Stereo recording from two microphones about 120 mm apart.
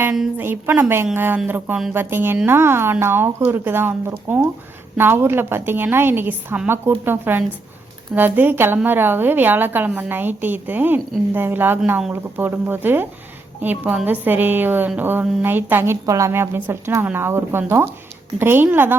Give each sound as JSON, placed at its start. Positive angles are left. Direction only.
{"t": 0.0, "sound": "a woman's voice", "side_deg": -10}